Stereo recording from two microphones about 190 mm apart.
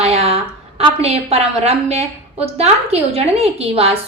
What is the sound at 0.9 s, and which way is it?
A woman's voice, 35° right (ahead or behind).